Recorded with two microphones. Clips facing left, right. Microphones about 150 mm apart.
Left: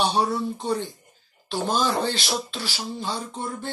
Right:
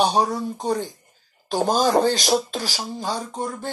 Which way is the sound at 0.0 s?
40° right (ahead or behind).